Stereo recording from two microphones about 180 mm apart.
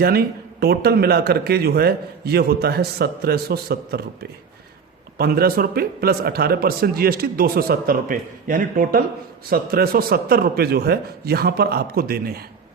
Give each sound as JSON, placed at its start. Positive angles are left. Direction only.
{"t": 0.0, "sound": "a man's voice", "side_deg": -60}